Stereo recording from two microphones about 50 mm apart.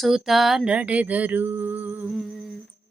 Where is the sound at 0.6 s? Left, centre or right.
Right.